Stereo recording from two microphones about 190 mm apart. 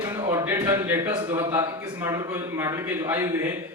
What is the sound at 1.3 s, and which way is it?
A man's voice, 10° right (ahead or behind).